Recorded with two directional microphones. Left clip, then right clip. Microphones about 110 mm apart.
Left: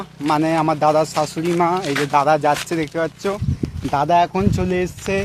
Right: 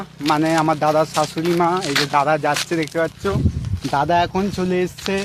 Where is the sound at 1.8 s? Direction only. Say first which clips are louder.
Left 1 dB; 35° left (ahead or behind).